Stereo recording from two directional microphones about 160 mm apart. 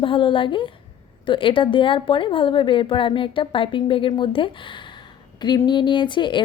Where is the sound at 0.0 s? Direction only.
30° left (ahead or behind).